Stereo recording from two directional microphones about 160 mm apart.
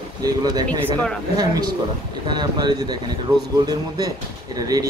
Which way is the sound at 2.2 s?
25° right (ahead or behind).